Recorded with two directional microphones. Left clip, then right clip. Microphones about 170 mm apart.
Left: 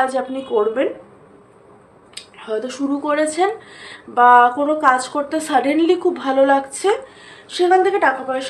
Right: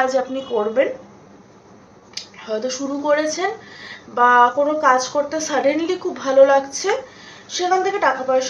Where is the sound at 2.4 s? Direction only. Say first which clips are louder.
Even; 35° left (ahead or behind).